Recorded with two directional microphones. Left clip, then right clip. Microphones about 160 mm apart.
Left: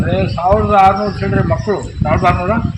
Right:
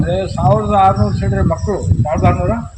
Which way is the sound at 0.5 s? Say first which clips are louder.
Left 2 dB; 20° right (ahead or behind).